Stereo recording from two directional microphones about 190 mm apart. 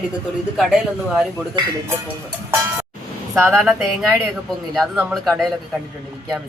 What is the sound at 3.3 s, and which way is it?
A woman's voice, 5° right (ahead or behind).